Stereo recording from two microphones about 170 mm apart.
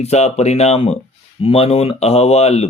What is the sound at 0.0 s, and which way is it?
Speech, 40° left (ahead or behind).